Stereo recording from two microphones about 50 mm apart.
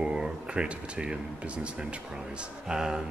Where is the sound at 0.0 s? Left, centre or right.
Centre.